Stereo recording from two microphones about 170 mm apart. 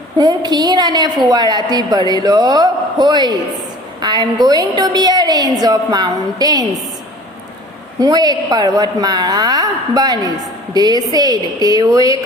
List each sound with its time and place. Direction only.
0.2 s a woman's voice: 25° right (ahead or behind)
7.9 s a woman's voice: 20° right (ahead or behind)